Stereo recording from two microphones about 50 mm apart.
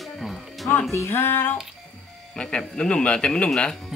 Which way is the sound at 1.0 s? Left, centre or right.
Left.